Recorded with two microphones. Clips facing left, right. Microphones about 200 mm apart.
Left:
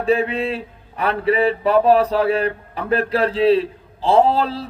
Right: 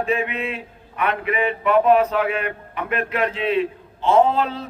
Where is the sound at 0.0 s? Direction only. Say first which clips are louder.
Left 5 dB; 35° left (ahead or behind).